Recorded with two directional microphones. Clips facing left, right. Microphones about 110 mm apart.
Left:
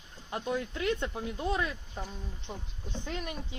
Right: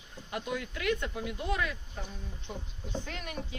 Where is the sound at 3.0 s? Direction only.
20° left (ahead or behind).